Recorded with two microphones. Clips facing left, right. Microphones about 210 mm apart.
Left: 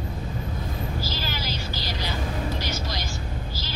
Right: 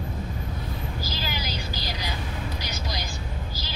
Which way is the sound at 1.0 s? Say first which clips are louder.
Left 1 dB; 15° right (ahead or behind).